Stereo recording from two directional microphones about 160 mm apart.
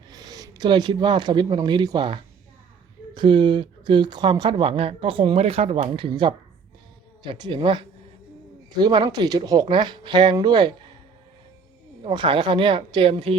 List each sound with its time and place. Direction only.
0.1 s speech: 25° right (ahead or behind)
12.0 s speech: 30° right (ahead or behind)